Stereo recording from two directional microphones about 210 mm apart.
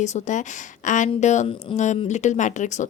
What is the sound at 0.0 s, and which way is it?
Speech, 35° left (ahead or behind).